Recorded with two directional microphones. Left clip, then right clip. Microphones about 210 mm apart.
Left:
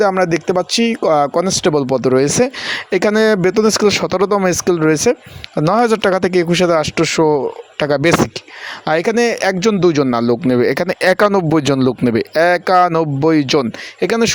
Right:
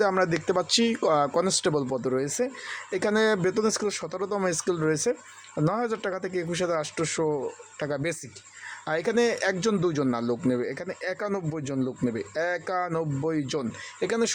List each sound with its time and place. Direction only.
0.0 s a man's voice: 30° left (ahead or behind)